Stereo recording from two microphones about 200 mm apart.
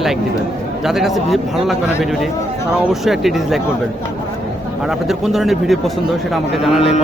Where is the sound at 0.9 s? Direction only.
Centre (ahead or behind).